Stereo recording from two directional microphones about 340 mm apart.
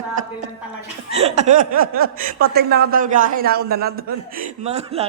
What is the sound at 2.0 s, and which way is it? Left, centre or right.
A man's voice, right.